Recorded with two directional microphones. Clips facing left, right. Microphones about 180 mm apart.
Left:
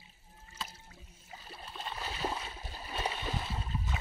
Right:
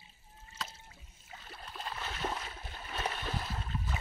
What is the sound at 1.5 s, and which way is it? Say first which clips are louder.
Boat: even; 5° left (ahead or behind).